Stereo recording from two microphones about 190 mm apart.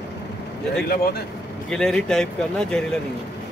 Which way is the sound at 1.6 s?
5° left (ahead or behind).